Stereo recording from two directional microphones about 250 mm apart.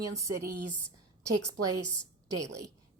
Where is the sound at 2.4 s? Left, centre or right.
Centre.